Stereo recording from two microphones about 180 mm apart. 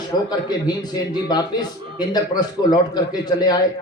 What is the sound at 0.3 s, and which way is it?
A man's voice, 25° left (ahead or behind).